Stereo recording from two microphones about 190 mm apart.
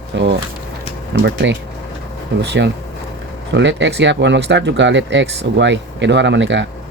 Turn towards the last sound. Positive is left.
turn(degrees=-70)  # may be behind; listen again after turning